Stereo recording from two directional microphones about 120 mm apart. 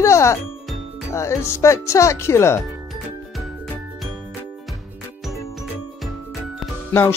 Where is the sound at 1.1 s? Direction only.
25° left (ahead or behind).